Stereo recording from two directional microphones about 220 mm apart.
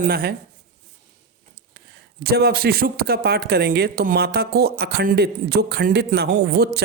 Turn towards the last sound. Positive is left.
turn(degrees=-45)  # may be behind; listen again after turning